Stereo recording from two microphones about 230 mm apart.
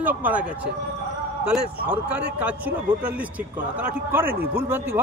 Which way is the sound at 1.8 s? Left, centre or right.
Centre.